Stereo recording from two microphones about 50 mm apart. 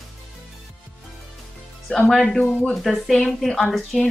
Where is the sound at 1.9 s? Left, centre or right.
Centre.